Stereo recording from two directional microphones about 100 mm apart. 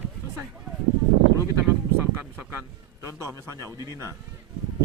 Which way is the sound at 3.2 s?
30° right (ahead or behind).